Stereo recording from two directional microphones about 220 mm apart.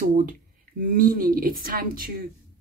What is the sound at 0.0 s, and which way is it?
Speech, 40° right (ahead or behind).